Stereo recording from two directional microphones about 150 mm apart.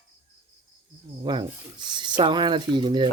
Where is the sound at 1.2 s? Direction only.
30° right (ahead or behind).